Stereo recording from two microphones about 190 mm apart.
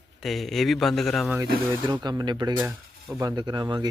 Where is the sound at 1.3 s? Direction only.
20° right (ahead or behind).